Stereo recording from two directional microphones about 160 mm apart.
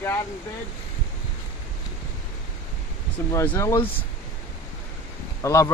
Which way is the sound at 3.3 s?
15° left (ahead or behind).